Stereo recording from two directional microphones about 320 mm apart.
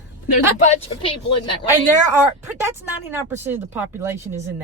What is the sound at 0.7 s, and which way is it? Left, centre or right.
Speech, centre.